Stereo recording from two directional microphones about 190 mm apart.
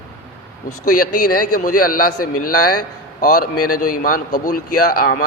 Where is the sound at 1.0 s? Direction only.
50° left (ahead or behind).